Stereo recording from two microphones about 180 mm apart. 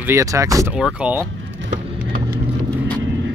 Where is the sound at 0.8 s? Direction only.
5° right (ahead or behind).